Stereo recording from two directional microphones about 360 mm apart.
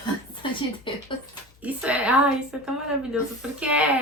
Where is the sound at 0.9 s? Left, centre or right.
Centre.